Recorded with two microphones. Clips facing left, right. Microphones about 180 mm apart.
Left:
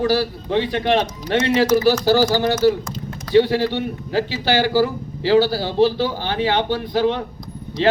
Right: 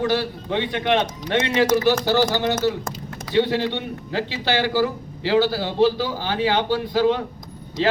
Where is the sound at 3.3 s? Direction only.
35° left (ahead or behind).